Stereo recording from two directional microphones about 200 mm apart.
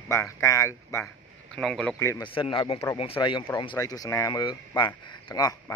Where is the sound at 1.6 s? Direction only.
Centre (ahead or behind).